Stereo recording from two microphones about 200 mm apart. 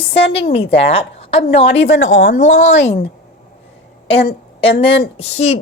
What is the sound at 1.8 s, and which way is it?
A woman's voice, 65° left (ahead or behind).